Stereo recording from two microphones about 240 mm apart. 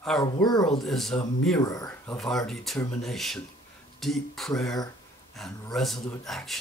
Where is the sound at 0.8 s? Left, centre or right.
Centre.